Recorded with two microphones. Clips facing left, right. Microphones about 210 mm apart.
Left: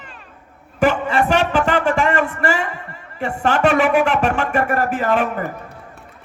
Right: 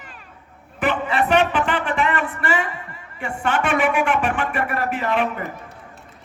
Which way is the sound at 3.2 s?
40° left (ahead or behind).